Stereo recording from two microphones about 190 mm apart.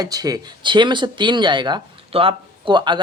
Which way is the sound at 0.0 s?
20° right (ahead or behind).